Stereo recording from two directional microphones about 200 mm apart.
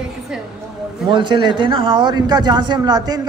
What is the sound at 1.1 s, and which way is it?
Speech, 25° right (ahead or behind).